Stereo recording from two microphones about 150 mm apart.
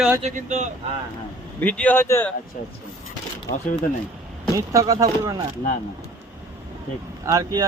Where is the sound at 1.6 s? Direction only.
10° left (ahead or behind).